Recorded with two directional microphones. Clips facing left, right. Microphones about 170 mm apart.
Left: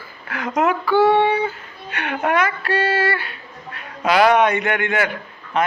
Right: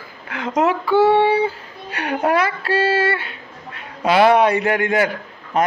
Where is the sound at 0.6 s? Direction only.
25° right (ahead or behind).